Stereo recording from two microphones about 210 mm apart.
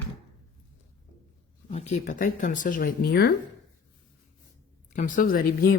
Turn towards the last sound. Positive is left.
turn(degrees=45)  # may be behind; listen again after turning